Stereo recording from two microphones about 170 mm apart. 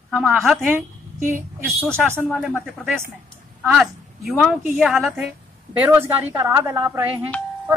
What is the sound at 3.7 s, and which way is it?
A woman's voice, centre (ahead or behind).